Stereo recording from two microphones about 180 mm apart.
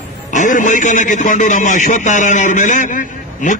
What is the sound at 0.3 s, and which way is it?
A man's voice, 45° left (ahead or behind).